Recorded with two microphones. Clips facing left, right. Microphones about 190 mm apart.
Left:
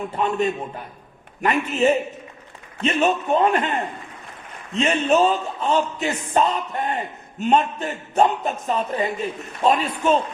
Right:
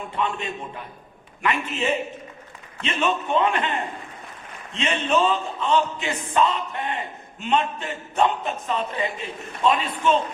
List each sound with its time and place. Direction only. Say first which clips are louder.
0.2 s a man's voice: left 6 dB; 40° left (ahead or behind)
4.7 s a man's voice: left 4 dB; 40° left (ahead or behind)